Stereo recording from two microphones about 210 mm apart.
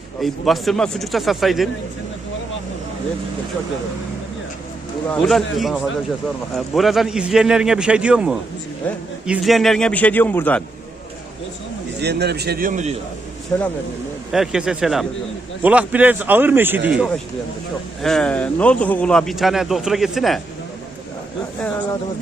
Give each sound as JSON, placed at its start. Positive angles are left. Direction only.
{"t": 0.2, "sound": "speech", "side_deg": 0}
{"t": 5.2, "sound": "speech", "side_deg": 0}
{"t": 11.9, "sound": "a man's voice", "side_deg": -50}
{"t": 13.5, "sound": "a man's voice", "side_deg": 5}
{"t": 18.0, "sound": "speech", "side_deg": 5}